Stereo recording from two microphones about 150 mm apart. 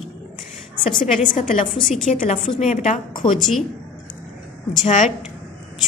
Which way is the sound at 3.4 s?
Centre (ahead or behind).